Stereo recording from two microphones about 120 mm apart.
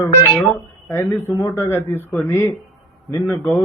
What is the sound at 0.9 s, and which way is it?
A man's voice, 20° left (ahead or behind).